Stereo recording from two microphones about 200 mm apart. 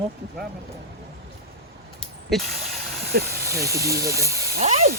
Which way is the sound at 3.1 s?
50° right (ahead or behind).